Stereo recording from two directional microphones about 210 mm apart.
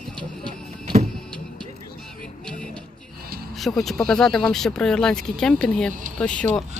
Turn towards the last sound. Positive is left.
turn(degrees=5)  # may be behind; listen again after turning